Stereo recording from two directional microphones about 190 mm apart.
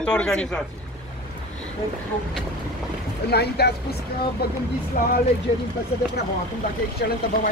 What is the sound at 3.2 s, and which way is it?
Speech, 60° left (ahead or behind).